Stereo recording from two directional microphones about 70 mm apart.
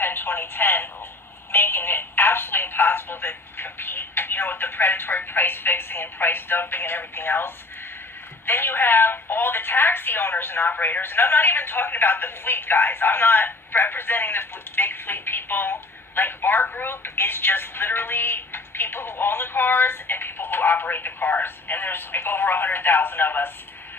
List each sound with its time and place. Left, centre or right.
0.0 s speech: left